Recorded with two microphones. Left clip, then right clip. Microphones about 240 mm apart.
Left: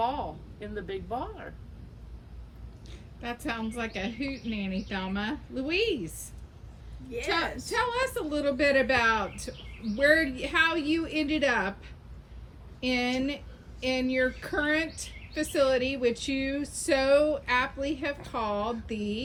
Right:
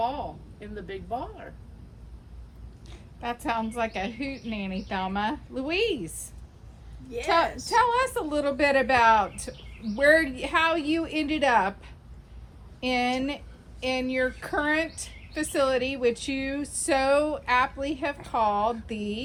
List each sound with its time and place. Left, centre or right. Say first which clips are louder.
0.0 s a woman's voice: right 1 dB; centre
2.9 s a woman's voice: right 4 dB; centre
12.8 s a woman's voice: right 3 dB; centre